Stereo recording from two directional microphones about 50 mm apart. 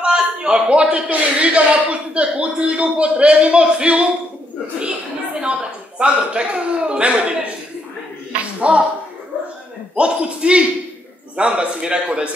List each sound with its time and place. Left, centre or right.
0.0 s a man's voice: centre
8.5 s speech: right
9.9 s a man's voice: right